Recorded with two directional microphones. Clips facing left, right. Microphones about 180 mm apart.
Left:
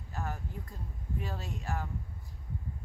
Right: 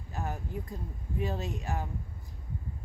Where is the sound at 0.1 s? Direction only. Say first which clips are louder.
Right 3 dB; 20° right (ahead or behind).